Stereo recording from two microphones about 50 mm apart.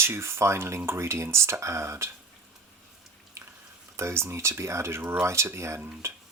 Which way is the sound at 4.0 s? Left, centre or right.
Right.